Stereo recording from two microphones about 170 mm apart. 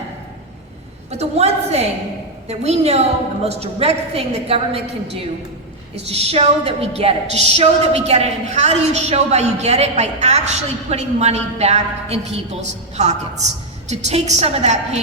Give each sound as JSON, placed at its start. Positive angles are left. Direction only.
{"t": 1.1, "sound": "a woman's voice", "side_deg": -40}
{"t": 6.1, "sound": "a woman's voice", "side_deg": -35}